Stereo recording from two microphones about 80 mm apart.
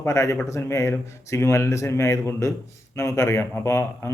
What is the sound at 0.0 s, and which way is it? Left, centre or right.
A man's voice, left.